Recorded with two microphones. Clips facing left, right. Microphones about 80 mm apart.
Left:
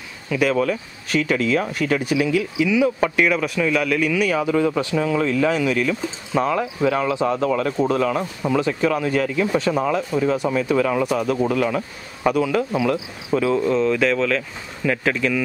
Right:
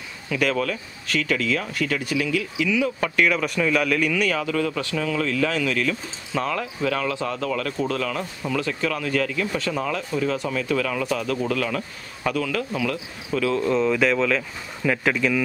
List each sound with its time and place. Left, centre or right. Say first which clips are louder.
0.3 s speech: left 4 dB; centre
4.4 s speech: left 5 dB; centre
13.6 s speech: left 2 dB; centre